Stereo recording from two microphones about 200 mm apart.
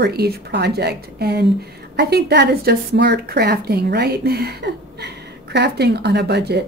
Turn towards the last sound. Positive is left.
turn(degrees=-55)  # may be behind; listen again after turning